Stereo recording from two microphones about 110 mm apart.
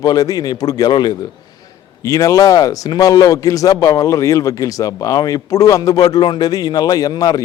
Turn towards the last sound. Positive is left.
turn(degrees=35)  # may be behind; listen again after turning